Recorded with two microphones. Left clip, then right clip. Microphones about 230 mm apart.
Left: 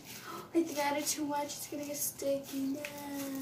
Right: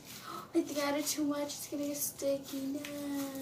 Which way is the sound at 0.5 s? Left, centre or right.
Centre.